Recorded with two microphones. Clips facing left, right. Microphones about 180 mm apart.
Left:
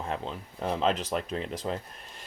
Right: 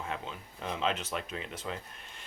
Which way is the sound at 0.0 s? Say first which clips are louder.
Left 5 dB; 35° left (ahead or behind).